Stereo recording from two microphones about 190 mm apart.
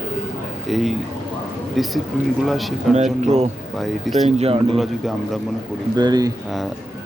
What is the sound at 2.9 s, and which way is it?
Speech, 35° right (ahead or behind).